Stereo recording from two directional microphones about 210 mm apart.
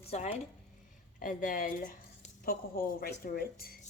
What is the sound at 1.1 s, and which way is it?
Speech, 40° left (ahead or behind).